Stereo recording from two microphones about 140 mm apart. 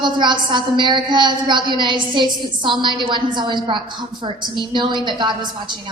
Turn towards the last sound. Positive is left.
turn(degrees=-35)  # may be behind; listen again after turning